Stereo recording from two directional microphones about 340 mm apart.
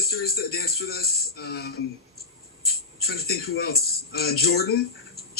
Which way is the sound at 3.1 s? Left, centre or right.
Left.